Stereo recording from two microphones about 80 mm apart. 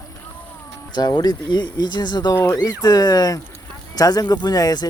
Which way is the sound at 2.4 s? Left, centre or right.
Left.